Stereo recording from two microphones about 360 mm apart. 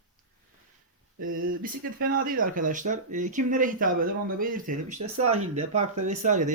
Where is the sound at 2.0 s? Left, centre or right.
Right.